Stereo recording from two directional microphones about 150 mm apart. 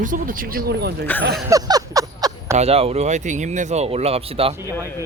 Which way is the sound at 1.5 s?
25° right (ahead or behind).